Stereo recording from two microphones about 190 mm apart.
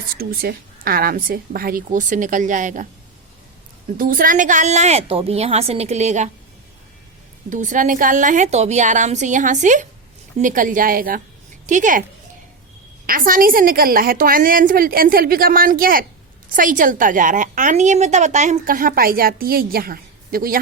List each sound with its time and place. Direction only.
0.2 s a woman's voice: 50° right (ahead or behind)
3.9 s a woman's voice: 45° right (ahead or behind)
7.5 s a woman's voice: 40° right (ahead or behind)
13.1 s a woman's voice: 45° right (ahead or behind)